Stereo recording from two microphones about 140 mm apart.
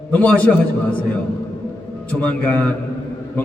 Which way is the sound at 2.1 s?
10° left (ahead or behind).